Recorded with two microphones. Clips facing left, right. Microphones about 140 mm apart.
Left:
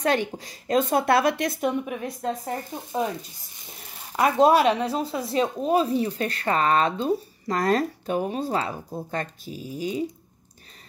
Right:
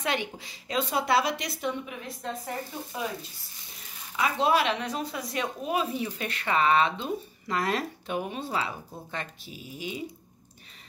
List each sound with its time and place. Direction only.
0.0 s a woman's voice: 45° left (ahead or behind)
2.9 s speech: 30° left (ahead or behind)
4.2 s speech: 40° left (ahead or behind)